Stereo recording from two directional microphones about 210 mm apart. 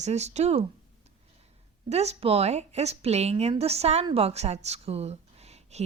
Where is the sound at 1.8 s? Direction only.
30° right (ahead or behind).